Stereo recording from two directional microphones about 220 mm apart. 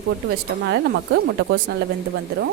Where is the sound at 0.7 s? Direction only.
55° right (ahead or behind).